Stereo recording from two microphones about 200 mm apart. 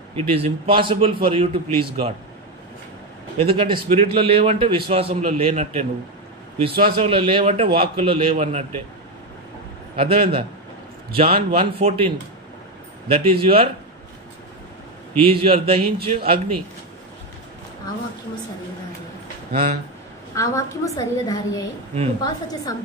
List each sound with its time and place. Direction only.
0.1 s a man's voice: 25° right (ahead or behind)
3.3 s a man's voice: 25° right (ahead or behind)
6.7 s a man's voice: 50° right (ahead or behind)
7.0 s a man's voice: 25° right (ahead or behind)
9.9 s a man's voice: 30° right (ahead or behind)
13.1 s a man's voice: 30° right (ahead or behind)
15.2 s a man's voice: 30° right (ahead or behind)
19.5 s a man's voice: 30° right (ahead or behind)
20.3 s a woman's voice: 15° left (ahead or behind)